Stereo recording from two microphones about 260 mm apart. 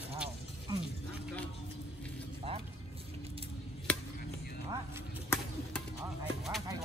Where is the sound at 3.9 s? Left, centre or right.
Centre.